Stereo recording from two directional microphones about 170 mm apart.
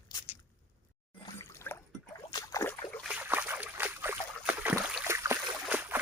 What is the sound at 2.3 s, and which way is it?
Rowboat, 20° left (ahead or behind).